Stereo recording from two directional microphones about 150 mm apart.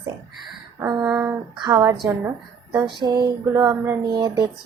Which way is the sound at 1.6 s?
25° right (ahead or behind).